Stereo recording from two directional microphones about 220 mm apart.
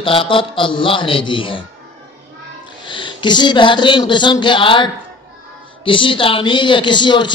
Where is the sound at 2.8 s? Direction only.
20° left (ahead or behind).